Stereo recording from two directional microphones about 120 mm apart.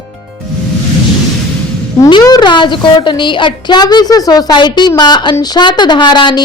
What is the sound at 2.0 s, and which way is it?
A woman's voice, 35° left (ahead or behind).